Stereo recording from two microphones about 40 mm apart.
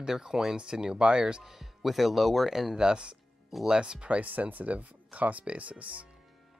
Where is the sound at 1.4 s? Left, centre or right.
Centre; by 6.0 s right.